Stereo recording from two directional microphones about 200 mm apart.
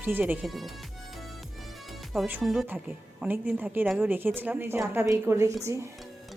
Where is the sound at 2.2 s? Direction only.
5° right (ahead or behind).